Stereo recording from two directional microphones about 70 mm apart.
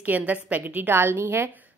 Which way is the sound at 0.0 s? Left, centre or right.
Right.